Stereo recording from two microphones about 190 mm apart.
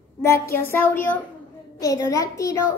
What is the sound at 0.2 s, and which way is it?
A child's voice, 15° left (ahead or behind).